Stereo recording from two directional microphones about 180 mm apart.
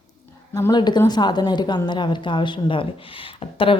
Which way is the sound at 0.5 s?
20° left (ahead or behind).